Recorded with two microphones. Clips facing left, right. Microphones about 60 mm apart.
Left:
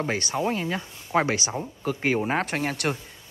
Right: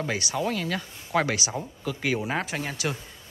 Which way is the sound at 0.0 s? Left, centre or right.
Left.